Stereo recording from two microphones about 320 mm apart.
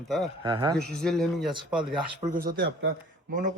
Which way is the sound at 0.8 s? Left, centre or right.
Centre.